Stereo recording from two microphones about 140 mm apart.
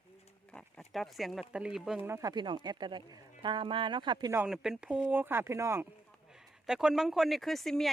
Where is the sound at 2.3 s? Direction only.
35° right (ahead or behind).